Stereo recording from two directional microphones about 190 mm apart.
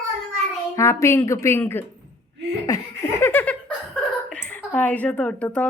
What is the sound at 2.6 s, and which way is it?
Laughter, 15° left (ahead or behind).